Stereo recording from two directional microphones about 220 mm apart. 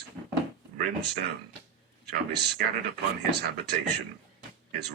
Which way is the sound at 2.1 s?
50° right (ahead or behind).